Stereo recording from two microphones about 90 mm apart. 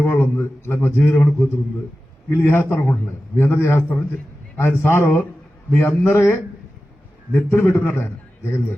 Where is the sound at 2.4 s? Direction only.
25° left (ahead or behind).